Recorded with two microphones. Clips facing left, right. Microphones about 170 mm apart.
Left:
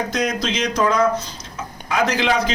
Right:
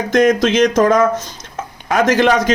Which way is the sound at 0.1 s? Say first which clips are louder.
Right 10 dB; 50° right (ahead or behind).